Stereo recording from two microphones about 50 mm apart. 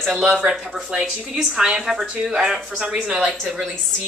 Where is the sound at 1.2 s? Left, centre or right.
Centre.